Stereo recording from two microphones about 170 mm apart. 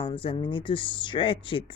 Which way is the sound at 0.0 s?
30° left (ahead or behind).